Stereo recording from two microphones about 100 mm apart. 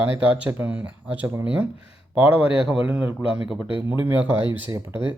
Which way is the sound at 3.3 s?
5° right (ahead or behind).